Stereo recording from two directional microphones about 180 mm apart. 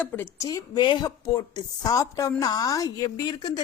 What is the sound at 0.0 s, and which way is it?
A woman's voice, 15° left (ahead or behind).